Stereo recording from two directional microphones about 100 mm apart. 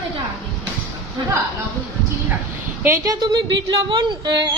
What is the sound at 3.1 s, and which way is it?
Speech, 45° right (ahead or behind).